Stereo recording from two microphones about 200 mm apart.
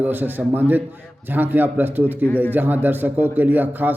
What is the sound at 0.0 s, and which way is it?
A man's voice, 10° right (ahead or behind).